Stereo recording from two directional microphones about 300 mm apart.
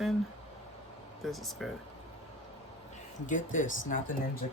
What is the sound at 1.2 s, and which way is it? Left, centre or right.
Speech, centre.